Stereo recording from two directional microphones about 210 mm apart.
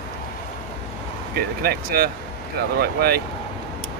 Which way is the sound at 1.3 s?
50° right (ahead or behind).